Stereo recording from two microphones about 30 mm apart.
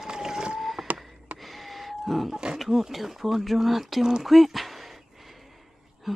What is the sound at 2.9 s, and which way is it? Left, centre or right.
Speech, centre.